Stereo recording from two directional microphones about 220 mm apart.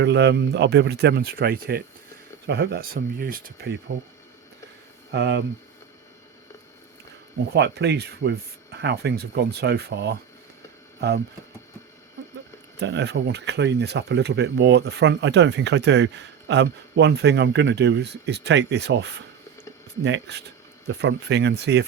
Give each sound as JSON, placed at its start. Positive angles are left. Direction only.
{"t": 0.0, "sound": "speech", "side_deg": -50}
{"t": 5.1, "sound": "speech", "side_deg": -55}
{"t": 7.5, "sound": "speech", "side_deg": -50}
{"t": 12.8, "sound": "speech", "side_deg": -50}